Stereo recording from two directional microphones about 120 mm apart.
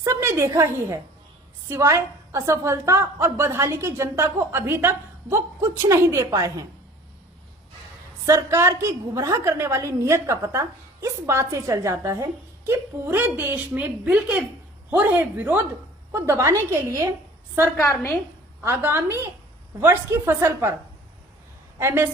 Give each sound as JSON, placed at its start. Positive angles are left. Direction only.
{"t": 0.0, "sound": "a woman's voice", "side_deg": -20}
{"t": 8.3, "sound": "a woman's voice", "side_deg": -20}
{"t": 17.7, "sound": "a woman's voice", "side_deg": 20}
{"t": 18.6, "sound": "a woman's voice", "side_deg": -20}
{"t": 21.8, "sound": "a woman's voice", "side_deg": -20}